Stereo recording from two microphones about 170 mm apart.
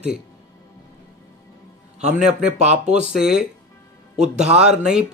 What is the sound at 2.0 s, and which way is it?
Speech, 5° right (ahead or behind).